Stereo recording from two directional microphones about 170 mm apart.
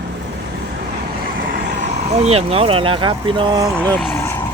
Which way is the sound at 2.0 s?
40° right (ahead or behind).